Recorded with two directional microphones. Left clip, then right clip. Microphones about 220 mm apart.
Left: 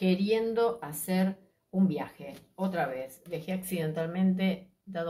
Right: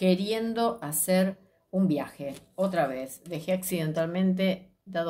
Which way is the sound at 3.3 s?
55° right (ahead or behind).